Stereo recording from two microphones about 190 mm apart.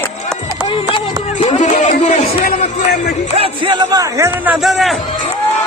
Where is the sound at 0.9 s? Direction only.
35° left (ahead or behind).